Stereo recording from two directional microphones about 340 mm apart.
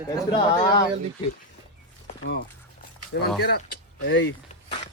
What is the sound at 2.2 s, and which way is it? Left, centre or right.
Speech, left.